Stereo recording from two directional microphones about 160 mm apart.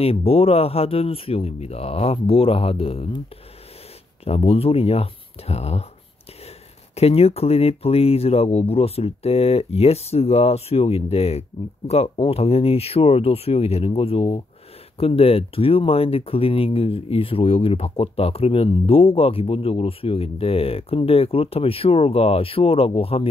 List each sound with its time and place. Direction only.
0.0 s speech: 35° left (ahead or behind)
4.2 s speech: 40° left (ahead or behind)
7.0 s speech: 40° left (ahead or behind)